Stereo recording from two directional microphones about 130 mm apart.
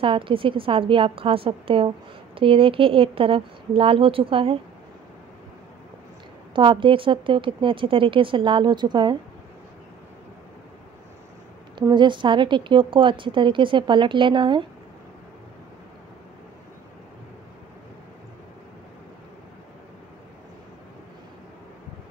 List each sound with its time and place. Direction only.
0.0 s speech: 45° right (ahead or behind)
6.5 s a woman's voice: 40° right (ahead or behind)
11.9 s a woman's voice: 35° right (ahead or behind)